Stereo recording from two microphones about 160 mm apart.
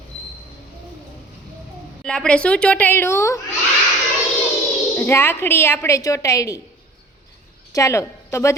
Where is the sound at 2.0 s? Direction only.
5° left (ahead or behind).